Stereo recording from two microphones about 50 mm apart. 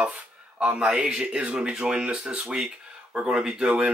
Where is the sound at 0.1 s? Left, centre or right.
Right.